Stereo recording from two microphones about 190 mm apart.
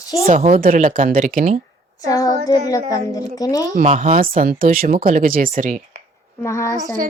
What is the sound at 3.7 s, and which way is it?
A woman's voice, 40° right (ahead or behind).